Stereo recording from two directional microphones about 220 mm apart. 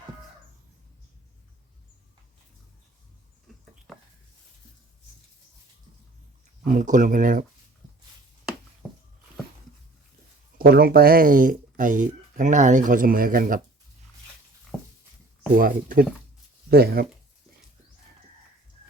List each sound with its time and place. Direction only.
3.9 s a sound: centre (ahead or behind)
6.7 s speech: 35° right (ahead or behind)
10.6 s speech: 45° right (ahead or behind)
14.7 s dog: 5° left (ahead or behind)
15.5 s speech: 40° right (ahead or behind)